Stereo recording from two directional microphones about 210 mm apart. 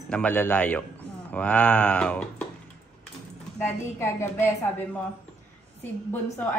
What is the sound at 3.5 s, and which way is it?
Speech, 10° left (ahead or behind).